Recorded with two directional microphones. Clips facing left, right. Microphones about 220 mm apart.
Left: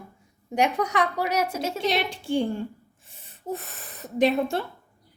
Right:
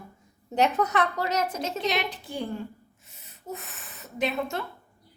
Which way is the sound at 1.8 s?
30° left (ahead or behind).